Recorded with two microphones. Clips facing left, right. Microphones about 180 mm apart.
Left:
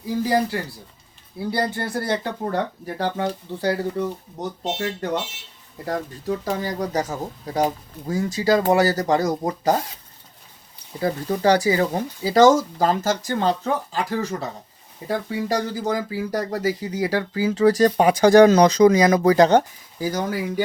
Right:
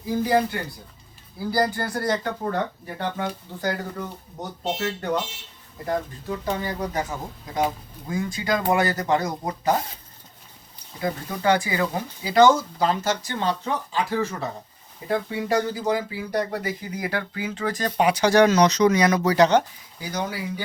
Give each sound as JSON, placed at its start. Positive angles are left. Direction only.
{"t": 0.3, "sound": "speech", "side_deg": 35}
{"t": 6.2, "sound": "speech", "side_deg": 40}
{"t": 11.0, "sound": "speech", "side_deg": 35}